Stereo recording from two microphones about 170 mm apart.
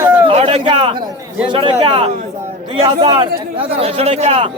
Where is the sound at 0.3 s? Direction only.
35° right (ahead or behind).